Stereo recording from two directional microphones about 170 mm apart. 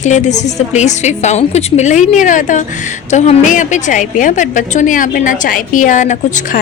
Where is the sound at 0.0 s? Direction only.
45° left (ahead or behind).